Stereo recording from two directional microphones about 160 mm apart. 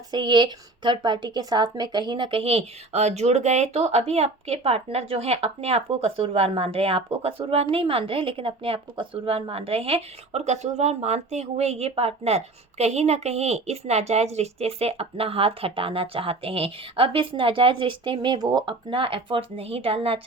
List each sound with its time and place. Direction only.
0.1 s speech: 30° right (ahead or behind)